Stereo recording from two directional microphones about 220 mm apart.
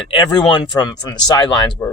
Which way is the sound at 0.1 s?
20° left (ahead or behind).